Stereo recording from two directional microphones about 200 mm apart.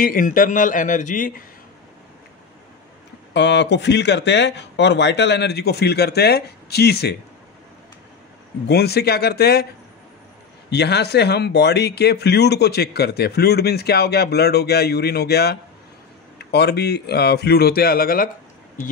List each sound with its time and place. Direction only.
0.0 s speech: 45° left (ahead or behind)
3.3 s speech: 60° left (ahead or behind)
8.6 s speech: 55° left (ahead or behind)
10.7 s speech: 55° left (ahead or behind)